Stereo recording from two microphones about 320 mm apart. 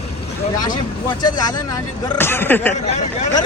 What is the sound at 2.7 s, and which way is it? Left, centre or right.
Speech, left.